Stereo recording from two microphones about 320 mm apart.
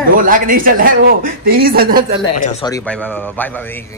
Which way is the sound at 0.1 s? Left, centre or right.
Right.